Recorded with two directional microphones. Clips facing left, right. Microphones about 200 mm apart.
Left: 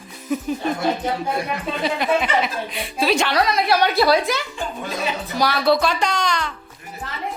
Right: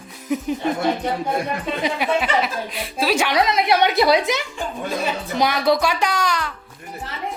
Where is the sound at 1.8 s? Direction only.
5° right (ahead or behind).